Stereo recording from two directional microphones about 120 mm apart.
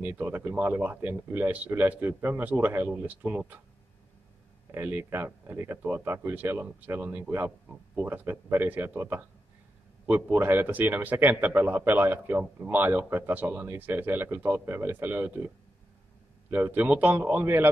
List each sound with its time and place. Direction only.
0.0 s a man's voice: 15° right (ahead or behind)
4.7 s a man's voice: 20° right (ahead or behind)